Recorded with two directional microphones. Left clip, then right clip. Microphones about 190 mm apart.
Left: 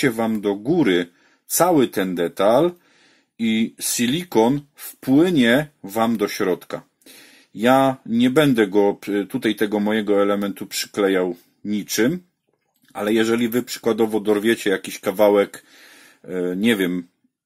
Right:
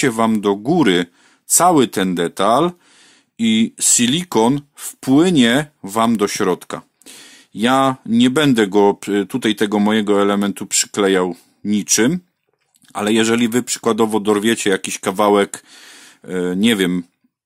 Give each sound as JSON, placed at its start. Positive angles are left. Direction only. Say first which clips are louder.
{"t": 0.0, "sound": "speech", "louder": "right 4 dB", "side_deg": -40}